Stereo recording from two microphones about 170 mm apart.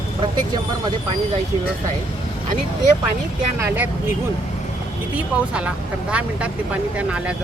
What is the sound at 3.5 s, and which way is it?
Speech, 15° right (ahead or behind).